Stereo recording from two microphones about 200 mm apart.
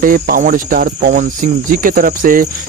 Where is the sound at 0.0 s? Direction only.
45° right (ahead or behind).